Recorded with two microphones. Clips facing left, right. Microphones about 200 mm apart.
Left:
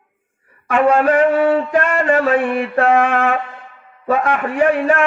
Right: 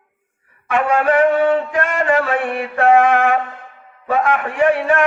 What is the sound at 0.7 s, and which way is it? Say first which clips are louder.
Mantra: left 3 dB; 40° left (ahead or behind).